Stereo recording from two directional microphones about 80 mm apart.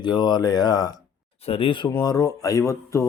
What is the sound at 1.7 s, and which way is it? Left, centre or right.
Speech, left.